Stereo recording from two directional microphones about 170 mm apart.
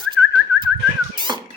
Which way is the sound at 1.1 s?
30° right (ahead or behind).